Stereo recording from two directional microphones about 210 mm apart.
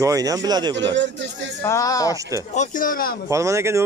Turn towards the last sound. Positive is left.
turn(degrees=-15)  # may be behind; listen again after turning